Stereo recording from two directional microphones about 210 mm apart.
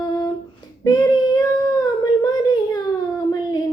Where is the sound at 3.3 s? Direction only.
20° left (ahead or behind).